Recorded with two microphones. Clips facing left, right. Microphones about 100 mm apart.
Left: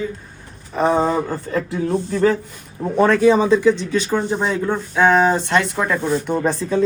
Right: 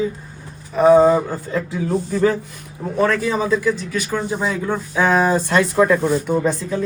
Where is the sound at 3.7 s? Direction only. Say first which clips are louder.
Left 3 dB; 10° right (ahead or behind).